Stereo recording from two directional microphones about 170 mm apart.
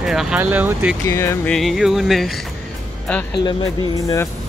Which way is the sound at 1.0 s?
15° left (ahead or behind).